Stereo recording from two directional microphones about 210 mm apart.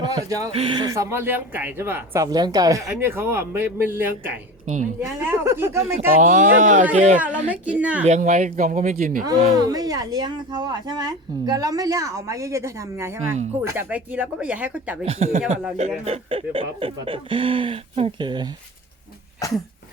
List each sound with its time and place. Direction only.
0.0 s speech: 20° right (ahead or behind)
4.6 s speech: 35° right (ahead or behind)
4.9 s speech: 10° right (ahead or behind)
6.2 s speech: 40° right (ahead or behind)
7.2 s speech: 5° right (ahead or behind)
8.0 s speech: 35° right (ahead or behind)
9.6 s speech: 20° right (ahead or behind)
15.0 s speech: 30° right (ahead or behind)
19.4 s cough: 15° left (ahead or behind)